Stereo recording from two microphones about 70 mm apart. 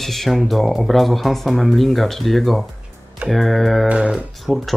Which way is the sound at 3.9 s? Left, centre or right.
Centre.